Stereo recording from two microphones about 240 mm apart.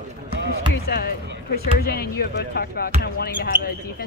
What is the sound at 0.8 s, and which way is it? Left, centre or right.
Speech, left.